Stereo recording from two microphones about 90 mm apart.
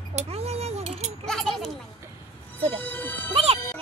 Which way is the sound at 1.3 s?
5° left (ahead or behind).